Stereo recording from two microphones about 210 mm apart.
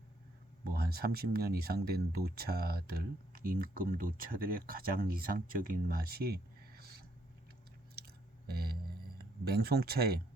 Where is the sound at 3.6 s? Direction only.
40° right (ahead or behind).